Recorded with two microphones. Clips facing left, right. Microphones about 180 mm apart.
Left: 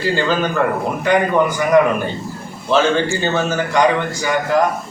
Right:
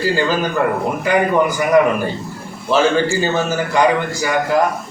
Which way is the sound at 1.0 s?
10° right (ahead or behind).